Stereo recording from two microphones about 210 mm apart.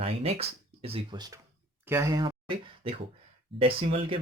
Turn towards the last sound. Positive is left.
turn(degrees=-25)  # may be behind; listen again after turning